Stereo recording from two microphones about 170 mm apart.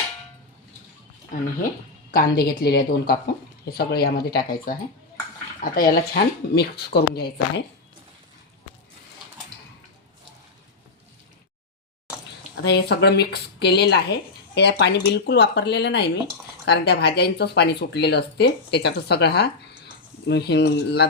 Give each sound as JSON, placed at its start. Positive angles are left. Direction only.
{"t": 1.3, "sound": "speech", "side_deg": 50}
{"t": 2.1, "sound": "speech", "side_deg": 65}
{"t": 12.6, "sound": "a woman's voice", "side_deg": 80}
{"t": 16.6, "sound": "speech", "side_deg": 75}